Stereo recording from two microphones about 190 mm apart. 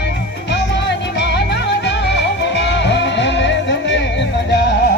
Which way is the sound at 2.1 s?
65° left (ahead or behind).